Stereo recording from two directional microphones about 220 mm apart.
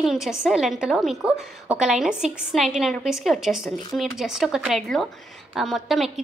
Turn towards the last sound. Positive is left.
turn(degrees=0)  # may be behind; listen again after turning